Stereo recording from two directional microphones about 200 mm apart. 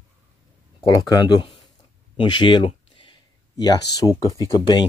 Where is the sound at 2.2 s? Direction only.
25° left (ahead or behind).